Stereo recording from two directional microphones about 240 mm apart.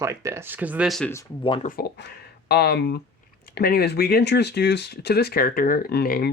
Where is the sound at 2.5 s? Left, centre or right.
Left.